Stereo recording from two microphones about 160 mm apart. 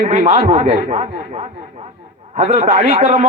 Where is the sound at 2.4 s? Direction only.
45° right (ahead or behind).